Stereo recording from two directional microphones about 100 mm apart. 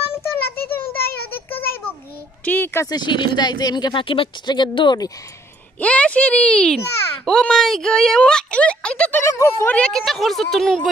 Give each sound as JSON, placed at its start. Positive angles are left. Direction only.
{"t": 0.1, "sound": "a sound", "side_deg": 20}
{"t": 2.4, "sound": "speech", "side_deg": 20}
{"t": 2.9, "sound": "speech", "side_deg": 50}
{"t": 5.8, "sound": "speech", "side_deg": 15}
{"t": 9.2, "sound": "speech", "side_deg": 30}
{"t": 9.7, "sound": "speech", "side_deg": 10}